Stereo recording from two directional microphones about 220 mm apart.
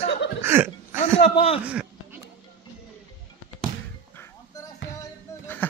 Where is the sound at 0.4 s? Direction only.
10° right (ahead or behind).